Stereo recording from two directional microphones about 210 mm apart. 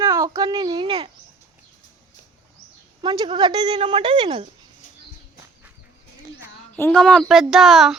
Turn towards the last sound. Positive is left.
turn(degrees=0)  # may be behind; listen again after turning